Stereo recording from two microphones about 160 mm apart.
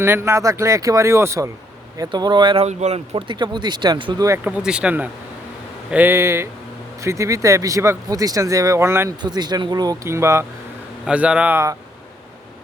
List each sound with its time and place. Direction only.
0.0 s speech: 15° right (ahead or behind)
2.6 s speech: 45° right (ahead or behind); by 4.4 s 25° right (ahead or behind)
4.4 s speech: 5° right (ahead or behind)